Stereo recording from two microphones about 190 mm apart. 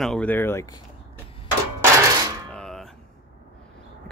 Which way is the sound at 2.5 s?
5° left (ahead or behind).